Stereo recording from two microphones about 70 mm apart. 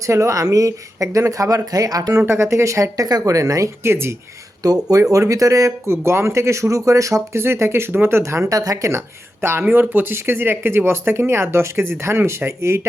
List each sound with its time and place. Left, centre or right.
0.1 s speech: right
2.2 s speech: right
3.1 s speech: right
3.8 s speech: right
4.6 s speech: right
8.2 s speech: right
9.4 s speech: right